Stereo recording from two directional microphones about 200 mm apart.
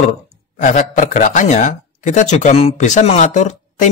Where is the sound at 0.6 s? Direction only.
40° left (ahead or behind).